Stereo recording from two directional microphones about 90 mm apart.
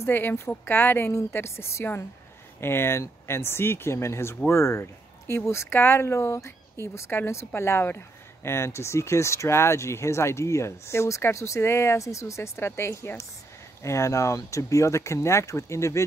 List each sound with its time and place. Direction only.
0.0 s speech: 25° left (ahead or behind)